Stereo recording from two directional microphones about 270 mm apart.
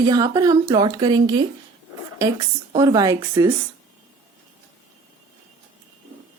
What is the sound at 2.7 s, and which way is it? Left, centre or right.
Speech, centre.